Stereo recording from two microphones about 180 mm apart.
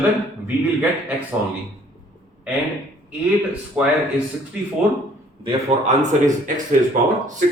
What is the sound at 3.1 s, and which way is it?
Speech, 5° right (ahead or behind).